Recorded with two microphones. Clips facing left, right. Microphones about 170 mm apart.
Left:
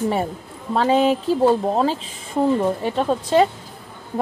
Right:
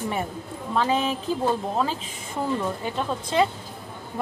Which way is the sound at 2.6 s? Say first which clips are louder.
Left 7 dB; 35° left (ahead or behind).